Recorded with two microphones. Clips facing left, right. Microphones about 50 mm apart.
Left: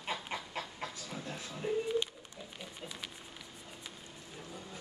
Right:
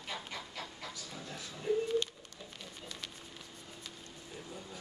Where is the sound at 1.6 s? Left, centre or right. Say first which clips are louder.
Right 1 dB; centre.